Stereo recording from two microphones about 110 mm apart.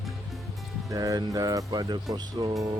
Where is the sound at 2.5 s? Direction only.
30° right (ahead or behind).